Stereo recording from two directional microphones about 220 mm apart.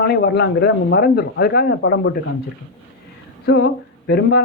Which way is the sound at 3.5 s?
45° left (ahead or behind).